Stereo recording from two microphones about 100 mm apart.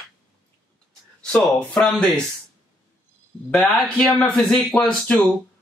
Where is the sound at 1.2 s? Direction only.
10° left (ahead or behind).